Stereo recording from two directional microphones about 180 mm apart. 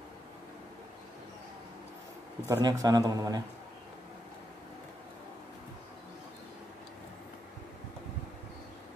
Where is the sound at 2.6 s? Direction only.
20° right (ahead or behind).